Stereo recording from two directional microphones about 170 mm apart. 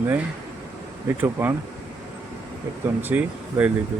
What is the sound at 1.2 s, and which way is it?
Speech, 10° right (ahead or behind).